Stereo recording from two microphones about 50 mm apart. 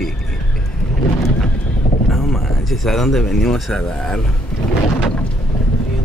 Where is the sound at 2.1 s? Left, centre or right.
Centre.